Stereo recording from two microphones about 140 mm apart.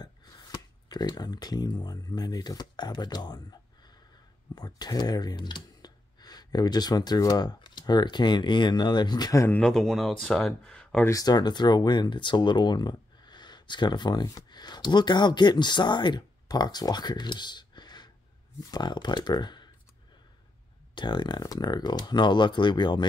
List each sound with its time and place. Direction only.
0.0 s speech: 30° left (ahead or behind)
4.6 s speech: 30° left (ahead or behind)
9.6 s speech: 5° left (ahead or behind)
11.1 s speech: 25° left (ahead or behind)
20.9 s speech: 35° left (ahead or behind)